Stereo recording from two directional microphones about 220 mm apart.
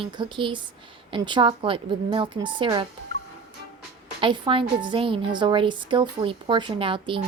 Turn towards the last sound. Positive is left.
turn(degrees=-25)  # may be behind; listen again after turning